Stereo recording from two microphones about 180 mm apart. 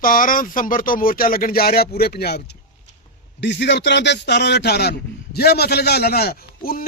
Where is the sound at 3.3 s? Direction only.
75° left (ahead or behind); by 6.8 s 55° left (ahead or behind).